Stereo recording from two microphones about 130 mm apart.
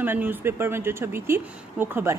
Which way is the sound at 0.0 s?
15° right (ahead or behind).